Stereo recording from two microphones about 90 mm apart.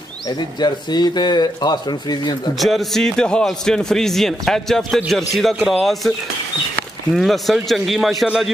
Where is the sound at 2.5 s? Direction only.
Centre (ahead or behind).